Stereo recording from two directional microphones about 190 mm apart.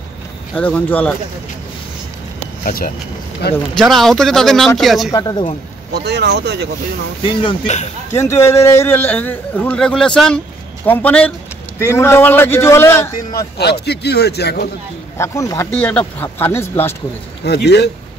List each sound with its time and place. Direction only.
0.6 s a man's voice: 10° left (ahead or behind)
2.6 s speech: 50° left (ahead or behind)
3.7 s speech: centre (ahead or behind)
5.1 s speech: 20° left (ahead or behind)
5.9 s speech: 60° right (ahead or behind)
7.4 s speech: 35° left (ahead or behind)
8.1 s a man's voice: 15° left (ahead or behind)
13.6 s a man's voice: 60° left (ahead or behind)
15.1 s a man's voice: 15° left (ahead or behind)
17.5 s a man's voice: 60° left (ahead or behind)